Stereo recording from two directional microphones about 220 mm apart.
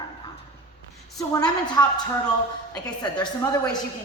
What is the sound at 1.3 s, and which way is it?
A woman's voice, 20° left (ahead or behind).